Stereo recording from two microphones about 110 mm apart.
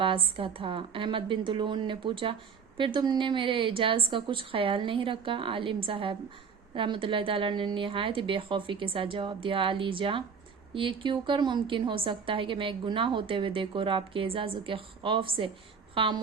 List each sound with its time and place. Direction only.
0.0 s a woman's voice: 55° right (ahead or behind)